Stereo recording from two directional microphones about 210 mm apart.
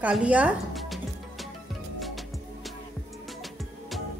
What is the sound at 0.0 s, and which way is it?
Speech, 5° right (ahead or behind).